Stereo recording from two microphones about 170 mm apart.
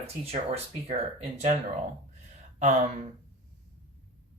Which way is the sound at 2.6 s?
45° right (ahead or behind).